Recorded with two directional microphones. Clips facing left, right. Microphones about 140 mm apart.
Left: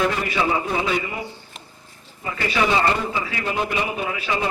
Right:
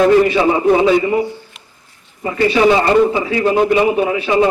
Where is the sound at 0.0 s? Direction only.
30° right (ahead or behind).